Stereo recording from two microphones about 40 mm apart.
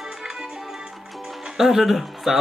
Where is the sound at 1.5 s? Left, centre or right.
Centre.